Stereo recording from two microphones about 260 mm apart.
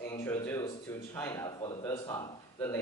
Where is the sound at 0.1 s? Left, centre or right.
Centre.